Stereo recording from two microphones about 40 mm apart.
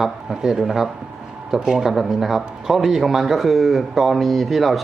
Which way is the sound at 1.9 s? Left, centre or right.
Centre.